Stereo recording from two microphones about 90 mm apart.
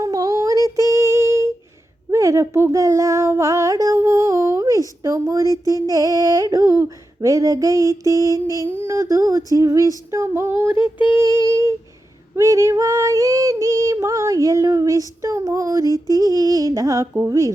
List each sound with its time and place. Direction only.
0.0 s female singing: 40° right (ahead or behind)
3.9 s a sound: 30° right (ahead or behind)
5.6 s female singing: 40° right (ahead or behind)